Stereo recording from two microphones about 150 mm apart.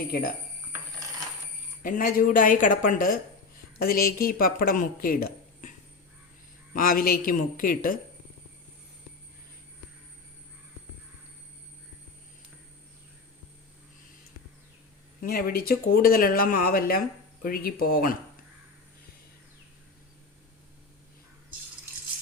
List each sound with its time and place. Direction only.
0.1 s speech: 75° left (ahead or behind)
1.8 s a woman's voice: 65° left (ahead or behind)
3.8 s speech: 85° left
6.7 s speech: 70° left (ahead or behind)
15.2 s speech: 75° left (ahead or behind)